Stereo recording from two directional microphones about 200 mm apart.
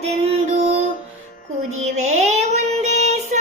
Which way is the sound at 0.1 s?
30° right (ahead or behind).